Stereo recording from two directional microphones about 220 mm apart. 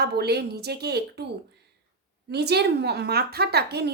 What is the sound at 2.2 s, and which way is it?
Speech, 50° right (ahead or behind).